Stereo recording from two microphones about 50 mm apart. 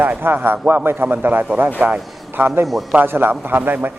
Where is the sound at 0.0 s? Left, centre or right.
Right.